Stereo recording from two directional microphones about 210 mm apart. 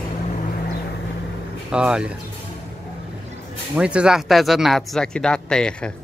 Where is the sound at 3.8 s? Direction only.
5° right (ahead or behind).